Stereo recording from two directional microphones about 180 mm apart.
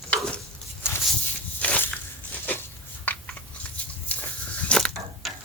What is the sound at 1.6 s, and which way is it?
Walk, 10° left (ahead or behind).